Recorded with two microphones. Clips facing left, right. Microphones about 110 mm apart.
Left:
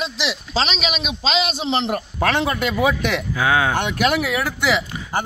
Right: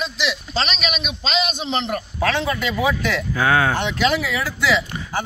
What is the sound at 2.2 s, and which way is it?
Speech, 55° left (ahead or behind).